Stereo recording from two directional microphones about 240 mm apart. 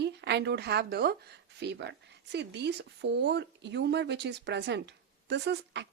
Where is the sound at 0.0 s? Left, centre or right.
Right.